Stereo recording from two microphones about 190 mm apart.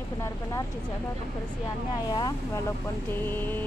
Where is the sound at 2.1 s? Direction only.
20° left (ahead or behind).